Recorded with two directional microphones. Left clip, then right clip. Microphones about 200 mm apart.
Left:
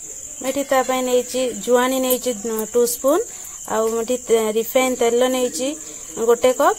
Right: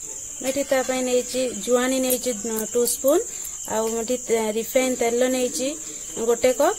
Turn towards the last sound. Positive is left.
turn(degrees=0)  # may be behind; listen again after turning